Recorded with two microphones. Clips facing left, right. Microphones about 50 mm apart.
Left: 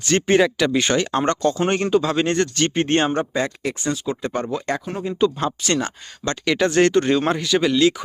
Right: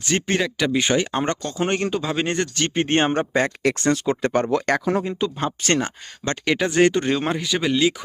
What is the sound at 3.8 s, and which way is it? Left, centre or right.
Speech, right.